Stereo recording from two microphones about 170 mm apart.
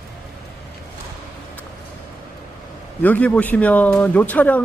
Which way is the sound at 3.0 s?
10° left (ahead or behind).